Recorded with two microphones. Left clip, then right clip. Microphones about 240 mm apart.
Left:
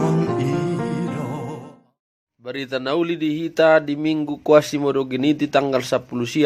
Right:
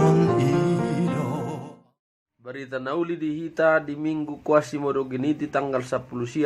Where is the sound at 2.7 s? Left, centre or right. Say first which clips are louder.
Left 5 dB; left.